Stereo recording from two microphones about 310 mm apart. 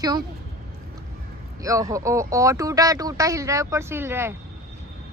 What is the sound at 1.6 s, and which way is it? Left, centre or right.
Speech, centre.